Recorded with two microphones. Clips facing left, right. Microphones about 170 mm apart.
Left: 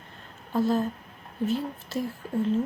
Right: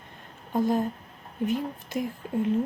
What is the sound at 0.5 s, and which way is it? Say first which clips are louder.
Speech: even; 15° right (ahead or behind).